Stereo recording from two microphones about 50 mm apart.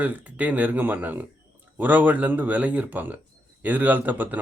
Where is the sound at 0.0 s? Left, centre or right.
Right.